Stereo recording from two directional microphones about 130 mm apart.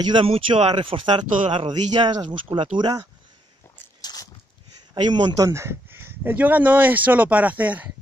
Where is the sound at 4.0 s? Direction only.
30° left (ahead or behind).